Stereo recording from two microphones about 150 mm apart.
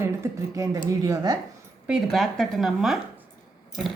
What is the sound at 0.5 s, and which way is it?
Speech, 25° right (ahead or behind).